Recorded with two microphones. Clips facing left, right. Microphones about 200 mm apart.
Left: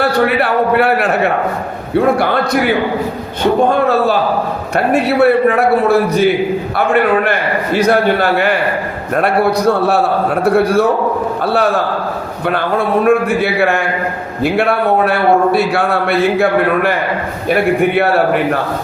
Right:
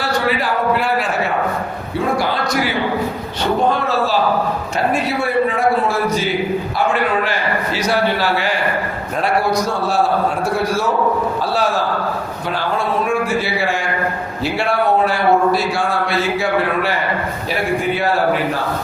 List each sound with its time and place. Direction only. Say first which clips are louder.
0.0 s a sound: left 6 dB; 60° left (ahead or behind)
2.1 s a man's voice: left 5 dB; 60° left (ahead or behind)
4.9 s a man's voice: left 10 dB; 65° left (ahead or behind)